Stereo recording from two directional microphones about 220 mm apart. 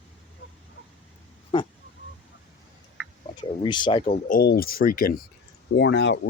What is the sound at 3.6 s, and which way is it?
Speech, 20° left (ahead or behind).